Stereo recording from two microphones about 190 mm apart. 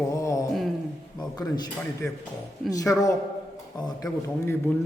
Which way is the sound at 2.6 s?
15° left (ahead or behind).